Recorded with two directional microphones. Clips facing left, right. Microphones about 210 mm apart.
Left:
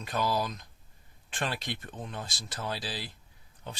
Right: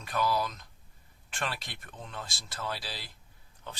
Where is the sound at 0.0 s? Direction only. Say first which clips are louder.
Even; 20° left (ahead or behind).